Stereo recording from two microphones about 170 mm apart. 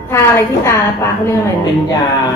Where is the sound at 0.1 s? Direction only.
15° left (ahead or behind).